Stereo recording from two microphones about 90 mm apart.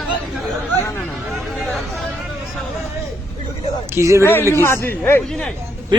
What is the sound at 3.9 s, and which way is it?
Speech, 30° right (ahead or behind).